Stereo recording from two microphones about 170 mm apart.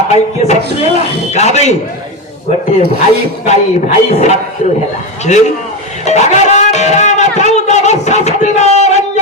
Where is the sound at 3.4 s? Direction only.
45° left (ahead or behind).